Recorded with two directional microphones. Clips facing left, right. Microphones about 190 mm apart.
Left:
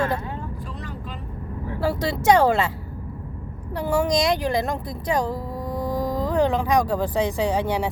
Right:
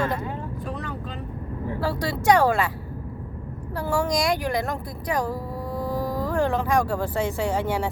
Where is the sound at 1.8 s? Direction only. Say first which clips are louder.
Left 4 dB; 25° left (ahead or behind).